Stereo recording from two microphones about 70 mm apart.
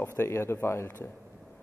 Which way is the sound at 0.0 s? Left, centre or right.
Left.